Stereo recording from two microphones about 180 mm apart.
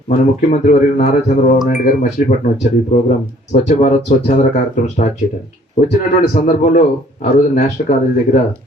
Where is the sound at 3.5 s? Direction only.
40° left (ahead or behind).